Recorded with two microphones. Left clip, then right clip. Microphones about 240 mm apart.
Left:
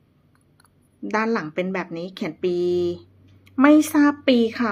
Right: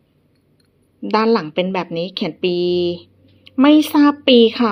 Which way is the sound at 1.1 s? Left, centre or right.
Centre.